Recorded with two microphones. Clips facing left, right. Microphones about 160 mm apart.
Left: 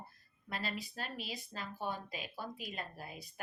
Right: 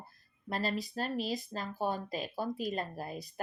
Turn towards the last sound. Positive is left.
turn(degrees=-40)  # may be behind; listen again after turning